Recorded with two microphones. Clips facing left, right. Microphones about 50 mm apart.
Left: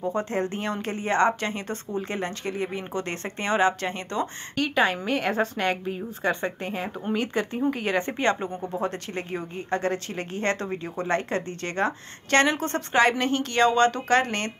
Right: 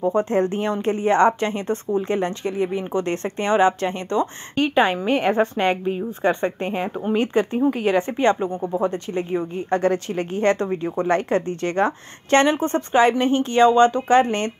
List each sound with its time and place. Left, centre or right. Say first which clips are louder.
0.1 s a woman's voice: right 7 dB; right
2.5 s speech: right 7 dB; centre
2.9 s a woman's voice: right 7 dB; right
3.3 s a woman's voice: right 4 dB; centre
7.7 s a woman's voice: right 6 dB; centre
9.7 s a woman's voice: right 6 dB; right